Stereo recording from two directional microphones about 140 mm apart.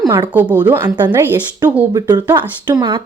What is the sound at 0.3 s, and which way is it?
Speech, 10° right (ahead or behind).